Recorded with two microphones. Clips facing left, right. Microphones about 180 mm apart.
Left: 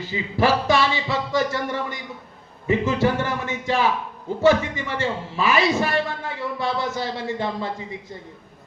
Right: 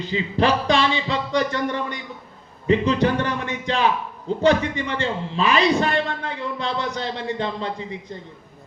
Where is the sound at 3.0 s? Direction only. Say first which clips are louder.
Right 1 dB; 15° right (ahead or behind).